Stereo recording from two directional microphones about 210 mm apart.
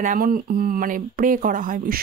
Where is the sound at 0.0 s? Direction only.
40° right (ahead or behind).